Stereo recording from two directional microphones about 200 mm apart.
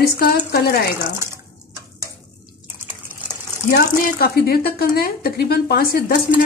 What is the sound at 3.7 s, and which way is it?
Speech, 50° left (ahead or behind).